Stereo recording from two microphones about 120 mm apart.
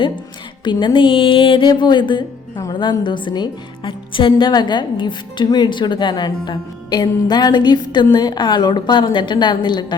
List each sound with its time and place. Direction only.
0.6 s a woman's voice: 40° left (ahead or behind)